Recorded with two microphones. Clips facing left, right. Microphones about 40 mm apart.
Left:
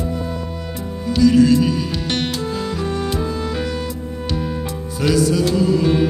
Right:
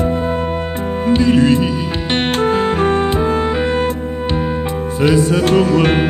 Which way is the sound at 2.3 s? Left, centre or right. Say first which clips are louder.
Right 9 dB; right.